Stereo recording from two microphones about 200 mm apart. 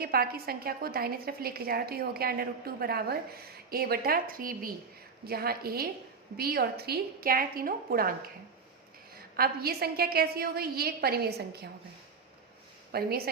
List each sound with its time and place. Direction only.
0.0 s a woman's voice: 50° right (ahead or behind)
9.3 s a woman's voice: 50° right (ahead or behind)
12.9 s a woman's voice: 50° right (ahead or behind)